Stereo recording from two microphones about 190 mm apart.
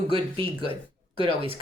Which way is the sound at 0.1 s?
30° right (ahead or behind).